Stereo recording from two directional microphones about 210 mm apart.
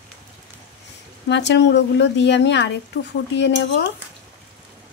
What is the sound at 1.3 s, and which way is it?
A woman's voice, 55° left (ahead or behind).